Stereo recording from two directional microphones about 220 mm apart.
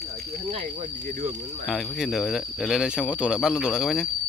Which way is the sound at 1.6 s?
Centre (ahead or behind).